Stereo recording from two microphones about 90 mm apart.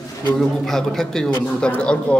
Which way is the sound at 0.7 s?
5° left (ahead or behind).